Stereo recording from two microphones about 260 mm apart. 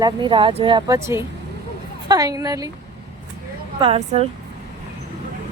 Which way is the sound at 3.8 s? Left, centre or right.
Right.